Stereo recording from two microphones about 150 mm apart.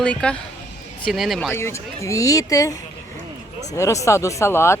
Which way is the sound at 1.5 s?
20° left (ahead or behind).